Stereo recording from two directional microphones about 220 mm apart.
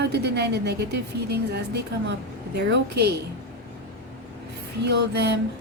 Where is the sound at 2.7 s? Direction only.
45° right (ahead or behind).